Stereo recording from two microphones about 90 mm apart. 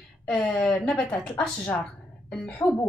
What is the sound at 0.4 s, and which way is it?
A woman's voice, 15° left (ahead or behind).